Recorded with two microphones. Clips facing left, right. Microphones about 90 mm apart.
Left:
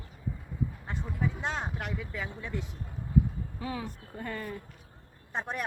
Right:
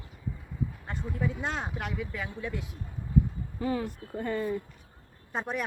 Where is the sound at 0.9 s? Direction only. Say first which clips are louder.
Right 2 dB; centre (ahead or behind).